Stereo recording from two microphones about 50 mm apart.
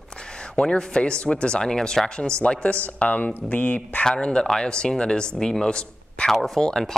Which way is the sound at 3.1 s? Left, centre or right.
Left.